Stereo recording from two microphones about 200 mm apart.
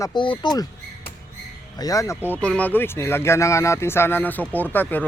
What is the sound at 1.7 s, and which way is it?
Speech, 15° left (ahead or behind).